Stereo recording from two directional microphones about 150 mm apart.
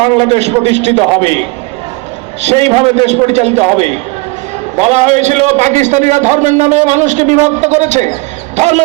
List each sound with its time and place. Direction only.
0.0 s a man's voice: 45° right (ahead or behind)
2.5 s a man's voice: 40° right (ahead or behind)
4.8 s a man's voice: 45° right (ahead or behind)
8.5 s a sound: 50° right (ahead or behind)